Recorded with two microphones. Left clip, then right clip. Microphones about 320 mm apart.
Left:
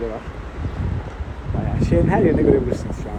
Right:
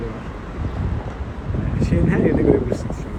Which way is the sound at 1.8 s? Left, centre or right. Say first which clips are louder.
Left 3 dB; centre.